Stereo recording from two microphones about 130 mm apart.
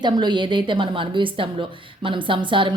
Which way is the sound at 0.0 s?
35° right (ahead or behind).